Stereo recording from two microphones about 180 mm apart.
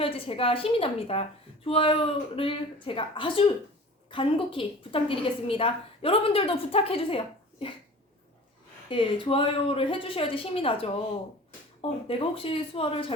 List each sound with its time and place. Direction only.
0.0 s a woman's voice: 30° left (ahead or behind)
8.9 s a woman's voice: 30° left (ahead or behind)
11.8 s a woman's voice: 30° left (ahead or behind)